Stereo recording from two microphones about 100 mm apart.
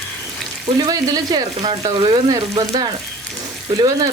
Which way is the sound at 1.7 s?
50° right (ahead or behind).